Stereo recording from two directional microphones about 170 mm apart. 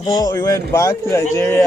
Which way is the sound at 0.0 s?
20° left (ahead or behind).